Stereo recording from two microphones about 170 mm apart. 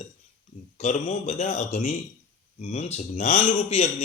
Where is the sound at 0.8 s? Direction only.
45° left (ahead or behind).